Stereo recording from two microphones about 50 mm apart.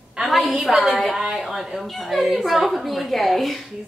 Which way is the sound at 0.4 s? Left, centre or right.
Centre.